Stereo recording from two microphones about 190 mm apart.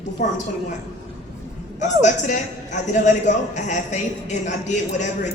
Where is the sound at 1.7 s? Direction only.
40° left (ahead or behind).